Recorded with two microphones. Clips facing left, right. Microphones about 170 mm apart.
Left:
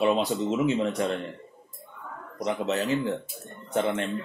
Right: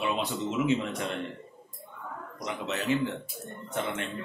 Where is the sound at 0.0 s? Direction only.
35° left (ahead or behind).